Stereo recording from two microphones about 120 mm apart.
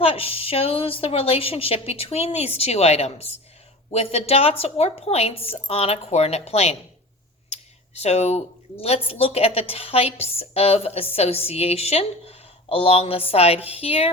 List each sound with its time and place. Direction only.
0.0 s speech: 55° left (ahead or behind)